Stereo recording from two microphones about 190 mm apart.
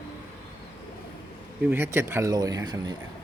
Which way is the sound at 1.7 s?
10° right (ahead or behind).